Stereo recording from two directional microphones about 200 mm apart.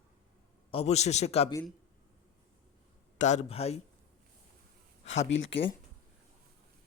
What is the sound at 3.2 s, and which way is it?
Speech, 35° left (ahead or behind).